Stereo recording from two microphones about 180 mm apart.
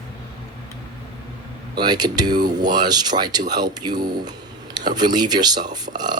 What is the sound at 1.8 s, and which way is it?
Speech, 25° right (ahead or behind).